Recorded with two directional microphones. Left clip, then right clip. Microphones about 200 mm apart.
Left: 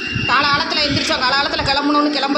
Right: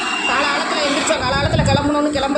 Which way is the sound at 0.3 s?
10° left (ahead or behind).